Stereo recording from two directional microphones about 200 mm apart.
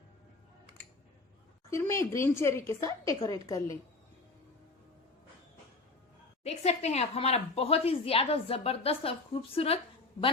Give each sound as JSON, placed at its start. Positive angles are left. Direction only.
{"t": 1.7, "sound": "a woman's voice", "side_deg": 15}
{"t": 6.4, "sound": "a woman's voice", "side_deg": 30}